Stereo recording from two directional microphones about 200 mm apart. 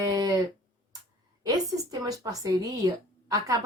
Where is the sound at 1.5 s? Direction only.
15° right (ahead or behind).